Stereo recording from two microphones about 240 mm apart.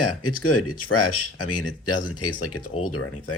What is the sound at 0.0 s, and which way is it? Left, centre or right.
Speech, left.